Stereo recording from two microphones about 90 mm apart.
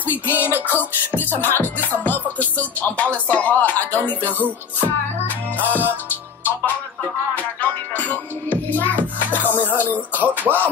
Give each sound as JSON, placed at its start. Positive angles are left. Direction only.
{"t": 0.0, "sound": "music", "side_deg": -20}
{"t": 0.7, "sound": "music", "side_deg": 20}
{"t": 4.3, "sound": "music", "side_deg": -20}
{"t": 4.8, "sound": "music", "side_deg": 20}
{"t": 9.4, "sound": "music", "side_deg": -20}
{"t": 10.3, "sound": "music", "side_deg": 20}